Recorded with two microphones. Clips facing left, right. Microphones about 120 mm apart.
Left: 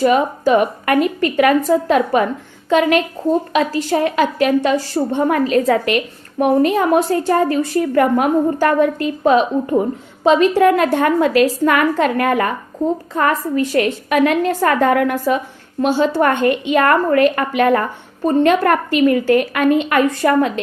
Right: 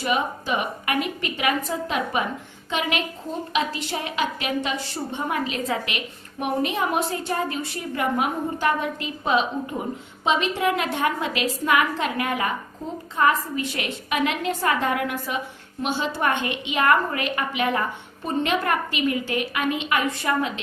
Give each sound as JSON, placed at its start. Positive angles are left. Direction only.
{"t": 0.0, "sound": "a woman's voice", "side_deg": 45}